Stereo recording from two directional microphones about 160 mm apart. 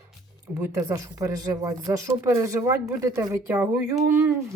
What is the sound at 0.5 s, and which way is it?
A woman's voice, 20° right (ahead or behind).